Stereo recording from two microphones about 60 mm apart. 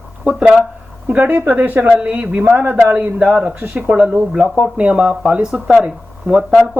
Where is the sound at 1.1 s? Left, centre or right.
Right.